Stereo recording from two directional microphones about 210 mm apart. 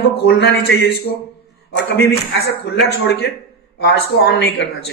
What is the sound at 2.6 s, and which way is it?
A man's voice, 50° left (ahead or behind).